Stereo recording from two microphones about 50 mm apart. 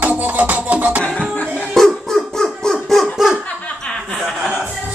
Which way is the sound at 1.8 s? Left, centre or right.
Centre.